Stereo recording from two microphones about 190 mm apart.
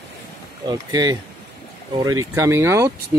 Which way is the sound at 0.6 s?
20° right (ahead or behind).